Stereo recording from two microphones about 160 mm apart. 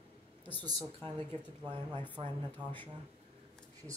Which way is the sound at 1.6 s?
30° right (ahead or behind).